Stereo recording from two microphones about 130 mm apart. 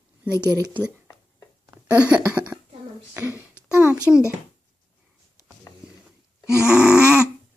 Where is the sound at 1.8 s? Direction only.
10° right (ahead or behind).